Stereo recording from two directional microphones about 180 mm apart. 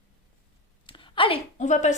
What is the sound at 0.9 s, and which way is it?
A woman's voice, 25° left (ahead or behind).